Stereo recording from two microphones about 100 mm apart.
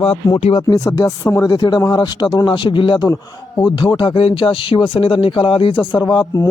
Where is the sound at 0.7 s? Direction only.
35° left (ahead or behind).